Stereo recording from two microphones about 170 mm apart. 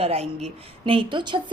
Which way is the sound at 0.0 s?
40° right (ahead or behind).